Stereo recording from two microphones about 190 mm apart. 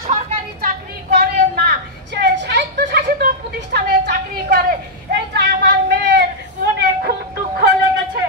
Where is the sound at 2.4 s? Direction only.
55° right (ahead or behind).